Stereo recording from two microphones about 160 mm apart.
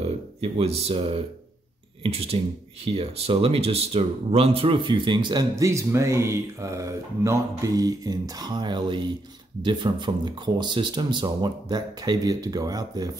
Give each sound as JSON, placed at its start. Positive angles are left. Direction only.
{"t": 0.0, "sound": "speech", "side_deg": -40}